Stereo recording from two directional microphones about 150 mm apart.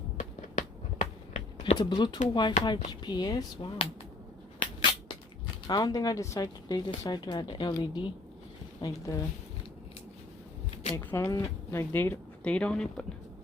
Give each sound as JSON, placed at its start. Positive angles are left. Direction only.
{"t": 0.2, "sound": "a sound", "side_deg": 50}
{"t": 1.8, "sound": "speech", "side_deg": 30}
{"t": 4.6, "sound": "a sound", "side_deg": 35}
{"t": 5.6, "sound": "speech", "side_deg": 25}
{"t": 10.9, "sound": "speech", "side_deg": 20}
{"t": 12.4, "sound": "speech", "side_deg": 5}